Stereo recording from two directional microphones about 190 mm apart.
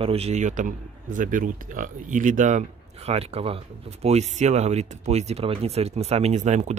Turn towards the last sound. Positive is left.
turn(degrees=-35)  # may be behind; listen again after turning